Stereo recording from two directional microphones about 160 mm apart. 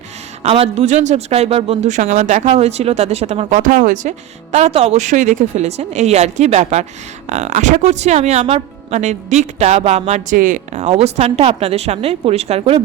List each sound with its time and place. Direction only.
0.4 s speech: 35° right (ahead or behind); by 4.1 s 50° right (ahead or behind)
4.5 s speech: 40° right (ahead or behind)